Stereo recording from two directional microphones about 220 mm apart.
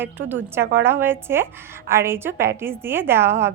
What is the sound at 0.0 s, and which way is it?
A woman's voice, 10° right (ahead or behind).